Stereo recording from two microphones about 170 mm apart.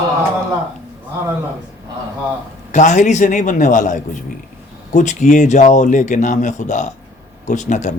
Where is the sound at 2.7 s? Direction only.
45° left (ahead or behind).